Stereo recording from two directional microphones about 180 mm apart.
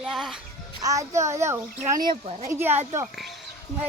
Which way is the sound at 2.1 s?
35° right (ahead or behind).